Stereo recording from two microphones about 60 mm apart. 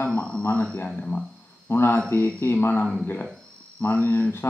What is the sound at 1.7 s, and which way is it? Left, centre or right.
Speech, left.